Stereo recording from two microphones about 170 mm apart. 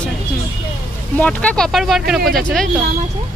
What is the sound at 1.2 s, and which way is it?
Speech, 10° left (ahead or behind).